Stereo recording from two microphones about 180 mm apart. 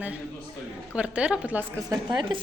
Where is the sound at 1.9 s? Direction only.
25° right (ahead or behind).